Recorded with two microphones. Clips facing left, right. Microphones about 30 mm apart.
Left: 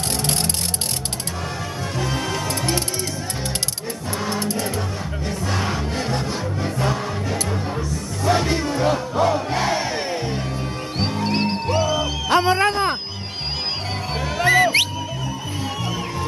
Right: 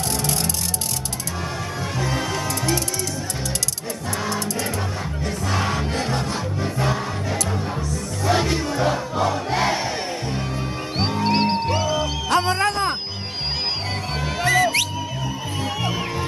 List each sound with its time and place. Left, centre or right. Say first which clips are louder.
0.1 s music: left 1 dB; left
2.0 s music: even; centre
2.4 s music: even; left
4.3 s music: left 3 dB; left
5.2 s music: right 1 dB; centre
8.5 s crowd: left 1 dB; centre
9.5 s crowd: even; centre
11.0 s music: right 2 dB; centre
12.3 s music: left 3 dB; centre
14.4 s music: left 3 dB; left